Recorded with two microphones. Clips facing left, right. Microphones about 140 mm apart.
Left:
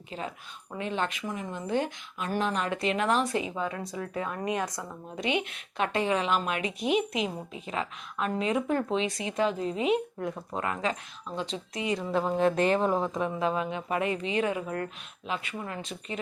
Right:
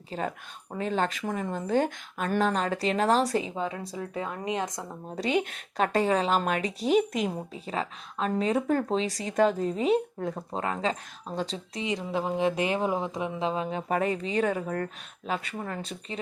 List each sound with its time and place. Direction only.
0.1 s a woman's voice: 45° right (ahead or behind); by 4.9 s 20° right (ahead or behind)
4.9 s a woman's voice: 40° right (ahead or behind); by 13.1 s 10° right (ahead or behind)
13.4 s a woman's voice: 30° right (ahead or behind)